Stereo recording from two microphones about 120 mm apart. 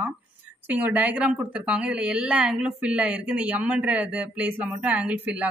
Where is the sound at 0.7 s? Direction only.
10° right (ahead or behind).